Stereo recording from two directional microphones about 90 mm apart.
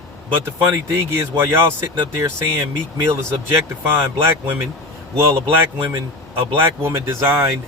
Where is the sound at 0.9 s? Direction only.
25° right (ahead or behind).